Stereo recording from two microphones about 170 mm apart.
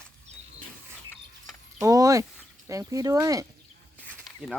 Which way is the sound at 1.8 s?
20° right (ahead or behind).